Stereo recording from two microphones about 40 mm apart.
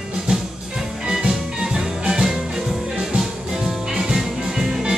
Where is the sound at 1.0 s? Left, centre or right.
Centre.